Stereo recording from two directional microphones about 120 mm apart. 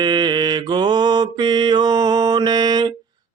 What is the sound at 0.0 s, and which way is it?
Mantra, 40° right (ahead or behind).